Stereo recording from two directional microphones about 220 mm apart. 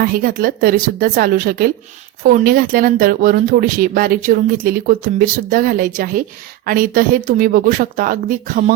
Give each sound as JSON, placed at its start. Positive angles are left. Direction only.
{"t": 0.0, "sound": "speech", "side_deg": -40}